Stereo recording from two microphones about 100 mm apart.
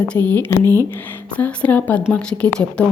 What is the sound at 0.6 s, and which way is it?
Speech, 35° right (ahead or behind).